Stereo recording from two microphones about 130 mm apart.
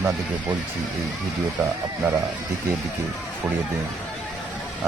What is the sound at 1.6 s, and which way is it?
Speech, centre (ahead or behind).